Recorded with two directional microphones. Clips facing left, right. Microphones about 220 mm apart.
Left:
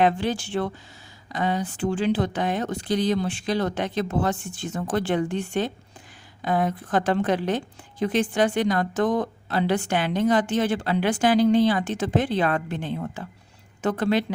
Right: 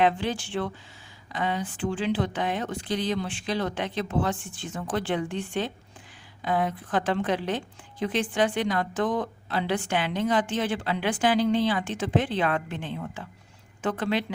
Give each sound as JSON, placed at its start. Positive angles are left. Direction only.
{"t": 0.0, "sound": "a woman's voice", "side_deg": 40}